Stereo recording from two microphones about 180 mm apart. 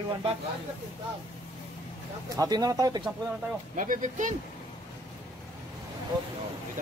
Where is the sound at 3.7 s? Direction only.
45° right (ahead or behind).